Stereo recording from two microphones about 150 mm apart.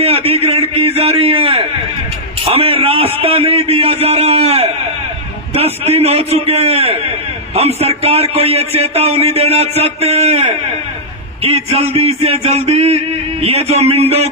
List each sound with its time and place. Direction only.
0.0 s a man's voice: 40° right (ahead or behind)